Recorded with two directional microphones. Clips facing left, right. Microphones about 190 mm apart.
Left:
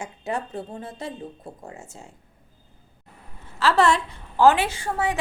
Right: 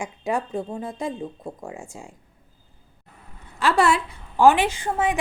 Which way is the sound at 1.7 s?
15° right (ahead or behind).